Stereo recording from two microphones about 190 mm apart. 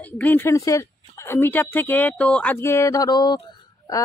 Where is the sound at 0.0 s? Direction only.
10° left (ahead or behind).